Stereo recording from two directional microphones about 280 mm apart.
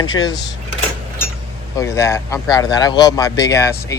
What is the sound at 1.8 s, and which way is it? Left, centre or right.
Speech, centre.